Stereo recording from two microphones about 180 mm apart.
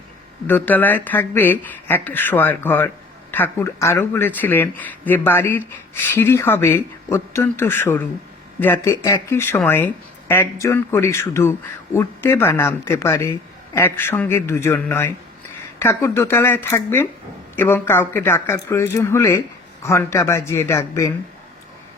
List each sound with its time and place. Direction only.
0.4 s speech: 10° left (ahead or behind)